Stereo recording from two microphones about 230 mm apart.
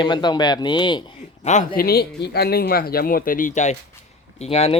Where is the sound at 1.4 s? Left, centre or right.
Left.